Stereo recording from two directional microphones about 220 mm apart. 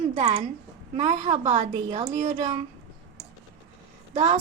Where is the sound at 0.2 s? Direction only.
30° right (ahead or behind).